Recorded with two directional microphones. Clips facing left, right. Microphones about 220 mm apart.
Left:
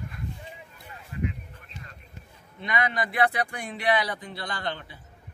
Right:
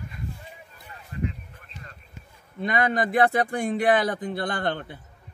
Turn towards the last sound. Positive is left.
turn(degrees=-55)  # may be behind; listen again after turning